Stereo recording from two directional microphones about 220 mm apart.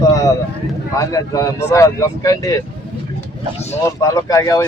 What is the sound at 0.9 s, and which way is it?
A man's voice, 15° left (ahead or behind).